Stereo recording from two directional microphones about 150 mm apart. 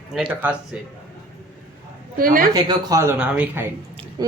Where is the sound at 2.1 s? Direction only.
70° right (ahead or behind).